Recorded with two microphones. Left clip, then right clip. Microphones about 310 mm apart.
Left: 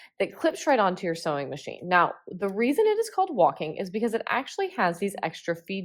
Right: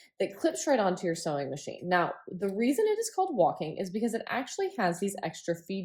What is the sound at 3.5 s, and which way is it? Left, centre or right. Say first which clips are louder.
Speech: left 3 dB; centre.